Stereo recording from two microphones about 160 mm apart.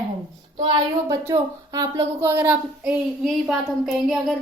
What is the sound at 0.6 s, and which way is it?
Speech, 25° right (ahead or behind).